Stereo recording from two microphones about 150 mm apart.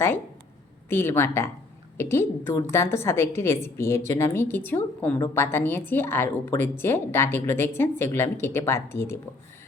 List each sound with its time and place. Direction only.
0.9 s a woman's voice: 15° left (ahead or behind)